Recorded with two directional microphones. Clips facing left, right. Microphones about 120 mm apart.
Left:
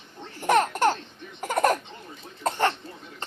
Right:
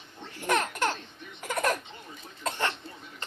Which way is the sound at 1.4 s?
40° left (ahead or behind).